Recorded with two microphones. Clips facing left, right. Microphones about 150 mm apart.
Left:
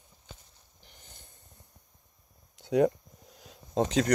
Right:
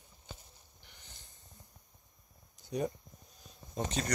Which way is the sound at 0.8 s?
40° left (ahead or behind).